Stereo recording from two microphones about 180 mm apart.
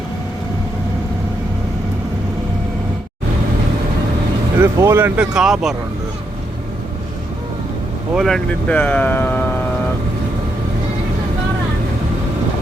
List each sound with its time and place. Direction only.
4.5 s speech: 15° right (ahead or behind)
8.1 s speech: centre (ahead or behind)